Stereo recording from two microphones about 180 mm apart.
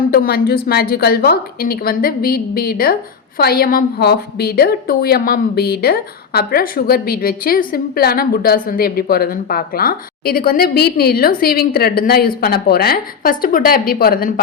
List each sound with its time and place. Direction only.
0.1 s a woman's voice: 55° left (ahead or behind)